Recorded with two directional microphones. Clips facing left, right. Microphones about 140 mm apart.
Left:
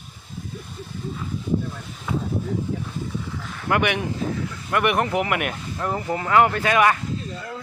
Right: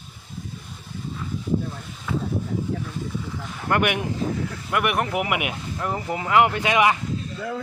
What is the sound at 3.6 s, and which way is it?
A man's voice, 5° right (ahead or behind).